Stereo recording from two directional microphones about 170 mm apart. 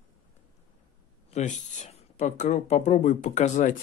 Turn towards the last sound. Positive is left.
turn(degrees=45)  # may be behind; listen again after turning